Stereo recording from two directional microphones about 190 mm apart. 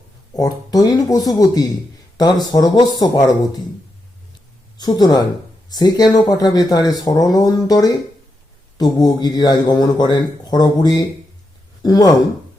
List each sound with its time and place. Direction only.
0.3 s speech: 20° left (ahead or behind)
4.8 s speech: 20° left (ahead or behind)